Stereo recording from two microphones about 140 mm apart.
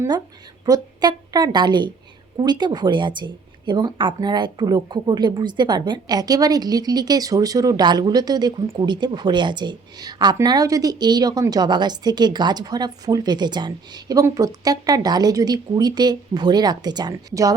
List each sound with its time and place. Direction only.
0.6 s a woman's voice: 30° right (ahead or behind)